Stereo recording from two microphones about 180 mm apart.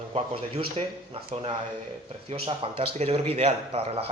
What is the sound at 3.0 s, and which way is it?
Speech, 35° right (ahead or behind).